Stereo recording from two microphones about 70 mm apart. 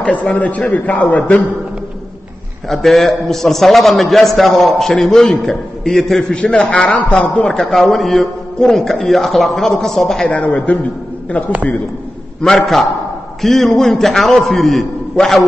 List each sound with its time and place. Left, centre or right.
0.0 s a man's voice: centre
2.7 s a man's voice: centre
6.3 s a man's voice: centre
7.7 s a man's voice: centre
10.3 s a man's voice: left
12.4 s a man's voice: centre